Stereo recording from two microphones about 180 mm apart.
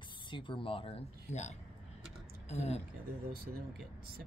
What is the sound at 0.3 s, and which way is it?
Speech, 25° left (ahead or behind).